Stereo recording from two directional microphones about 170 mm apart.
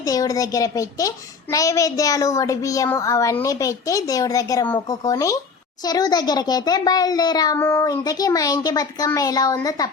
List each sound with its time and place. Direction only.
0.0 s a child's voice: 20° left (ahead or behind)